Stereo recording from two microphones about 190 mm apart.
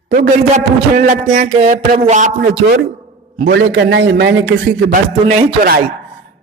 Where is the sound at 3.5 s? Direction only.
70° right (ahead or behind).